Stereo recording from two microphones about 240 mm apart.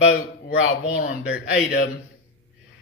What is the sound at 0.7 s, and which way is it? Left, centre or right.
Speech, left.